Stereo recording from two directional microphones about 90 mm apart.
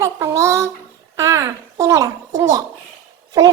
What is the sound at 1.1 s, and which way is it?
A child's voice, 40° right (ahead or behind).